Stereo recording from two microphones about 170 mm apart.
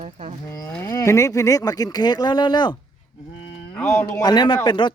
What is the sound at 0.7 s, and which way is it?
Speech, 15° left (ahead or behind).